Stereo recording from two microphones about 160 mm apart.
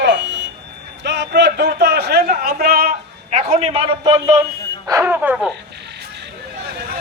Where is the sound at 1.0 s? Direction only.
90° right; by 2.9 s 75° right (ahead or behind).